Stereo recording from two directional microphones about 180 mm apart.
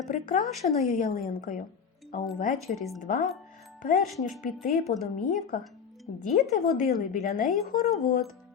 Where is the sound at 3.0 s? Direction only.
50° left (ahead or behind).